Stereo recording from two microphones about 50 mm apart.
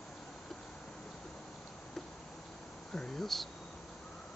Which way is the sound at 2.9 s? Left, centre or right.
Centre.